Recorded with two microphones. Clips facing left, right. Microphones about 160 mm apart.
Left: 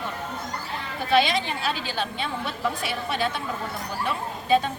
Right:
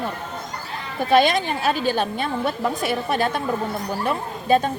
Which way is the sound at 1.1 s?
45° right (ahead or behind).